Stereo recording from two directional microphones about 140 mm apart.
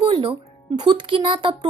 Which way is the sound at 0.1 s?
40° right (ahead or behind).